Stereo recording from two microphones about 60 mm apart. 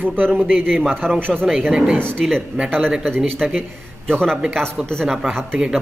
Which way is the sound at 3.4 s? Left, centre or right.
Centre.